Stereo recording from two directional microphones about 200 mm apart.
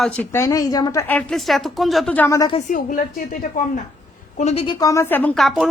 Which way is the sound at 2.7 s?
40° left (ahead or behind).